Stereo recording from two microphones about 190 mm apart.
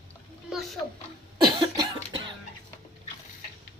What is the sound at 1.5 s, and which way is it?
Cough, 20° right (ahead or behind).